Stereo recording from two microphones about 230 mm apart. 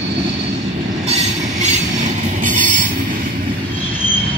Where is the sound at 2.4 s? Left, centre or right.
Right.